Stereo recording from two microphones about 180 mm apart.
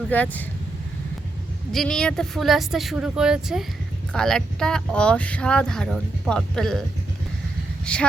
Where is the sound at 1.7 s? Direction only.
5° left (ahead or behind).